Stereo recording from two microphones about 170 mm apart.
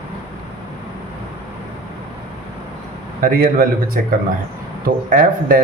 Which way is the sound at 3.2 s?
60° right (ahead or behind).